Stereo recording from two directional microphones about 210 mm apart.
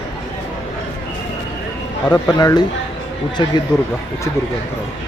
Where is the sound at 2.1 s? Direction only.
15° left (ahead or behind).